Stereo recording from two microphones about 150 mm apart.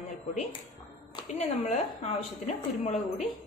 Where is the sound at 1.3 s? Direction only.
50° left (ahead or behind).